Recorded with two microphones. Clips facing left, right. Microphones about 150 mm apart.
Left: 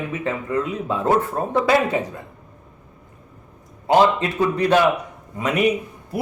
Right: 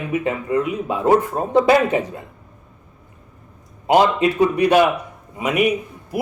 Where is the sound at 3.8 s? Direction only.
15° right (ahead or behind).